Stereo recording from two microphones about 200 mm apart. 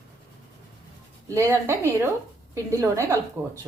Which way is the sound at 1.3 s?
15° right (ahead or behind).